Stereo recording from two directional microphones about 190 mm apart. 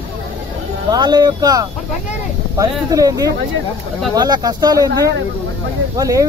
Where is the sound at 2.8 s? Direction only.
20° right (ahead or behind).